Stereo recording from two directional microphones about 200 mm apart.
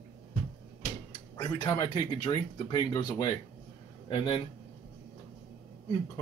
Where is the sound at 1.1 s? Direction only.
20° left (ahead or behind).